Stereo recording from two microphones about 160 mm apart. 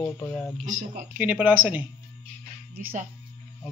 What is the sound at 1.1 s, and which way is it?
Speech, 10° right (ahead or behind).